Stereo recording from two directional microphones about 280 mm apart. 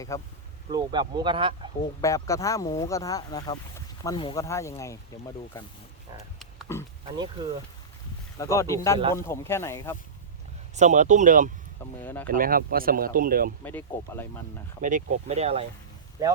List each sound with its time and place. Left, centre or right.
0.1 s speech: centre
0.7 s speech: centre
2.0 s speech: centre
6.4 s pig: centre
8.4 s speech: centre
10.8 s speech: right
12.0 s speech: centre
12.3 s speech: right
13.7 s speech: centre
14.8 s speech: right